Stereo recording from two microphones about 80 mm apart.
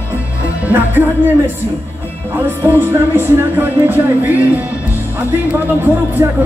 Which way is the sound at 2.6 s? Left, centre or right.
Right.